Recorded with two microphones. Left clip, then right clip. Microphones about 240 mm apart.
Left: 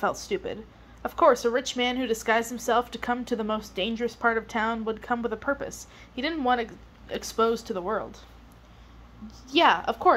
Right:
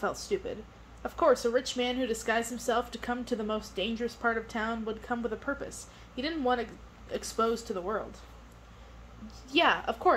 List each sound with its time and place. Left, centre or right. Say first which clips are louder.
0.0 s speech: left 4 dB; left
9.5 s speech: left 5 dB; left